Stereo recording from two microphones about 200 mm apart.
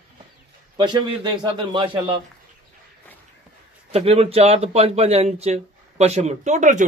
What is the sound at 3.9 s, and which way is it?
Speech, 30° right (ahead or behind).